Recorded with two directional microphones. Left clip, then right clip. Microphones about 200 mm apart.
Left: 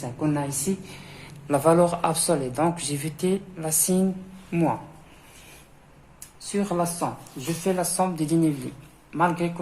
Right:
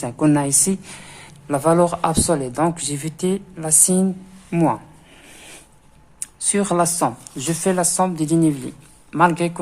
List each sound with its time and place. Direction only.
0.0 s speech: 50° right (ahead or behind)
6.1 s speech: 45° right (ahead or behind)